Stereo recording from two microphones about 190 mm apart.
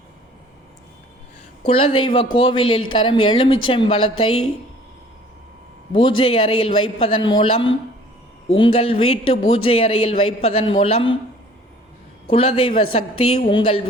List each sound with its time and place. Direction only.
1.6 s a man's voice: 30° left (ahead or behind)
5.9 s a man's voice: 25° left (ahead or behind)
12.3 s a man's voice: 30° left (ahead or behind)